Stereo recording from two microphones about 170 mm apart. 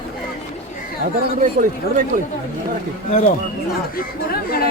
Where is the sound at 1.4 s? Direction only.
55° right (ahead or behind).